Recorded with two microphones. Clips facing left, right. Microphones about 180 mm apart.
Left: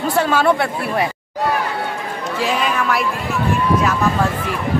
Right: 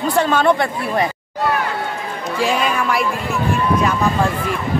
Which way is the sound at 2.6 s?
Centre (ahead or behind).